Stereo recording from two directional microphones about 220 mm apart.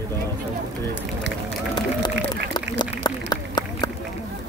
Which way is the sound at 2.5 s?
20° left (ahead or behind).